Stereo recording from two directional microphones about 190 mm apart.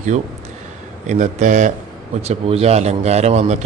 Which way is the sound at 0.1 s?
35° right (ahead or behind).